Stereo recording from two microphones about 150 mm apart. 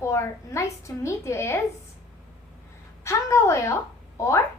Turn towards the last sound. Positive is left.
turn(degrees=20)  # may be behind; listen again after turning